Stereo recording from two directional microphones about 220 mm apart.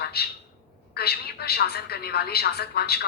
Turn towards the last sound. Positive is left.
turn(degrees=45)  # may be behind; listen again after turning